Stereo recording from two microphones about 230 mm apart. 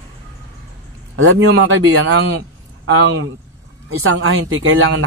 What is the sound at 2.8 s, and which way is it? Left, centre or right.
Speech, right.